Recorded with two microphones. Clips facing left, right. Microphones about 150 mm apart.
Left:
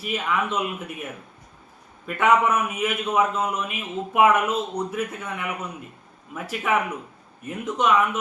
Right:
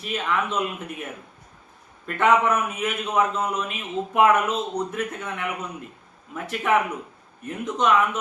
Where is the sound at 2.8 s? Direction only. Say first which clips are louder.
Left 2 dB; 5° left (ahead or behind).